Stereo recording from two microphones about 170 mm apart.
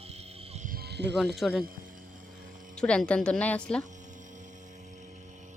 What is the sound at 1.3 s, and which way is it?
Speech, centre (ahead or behind).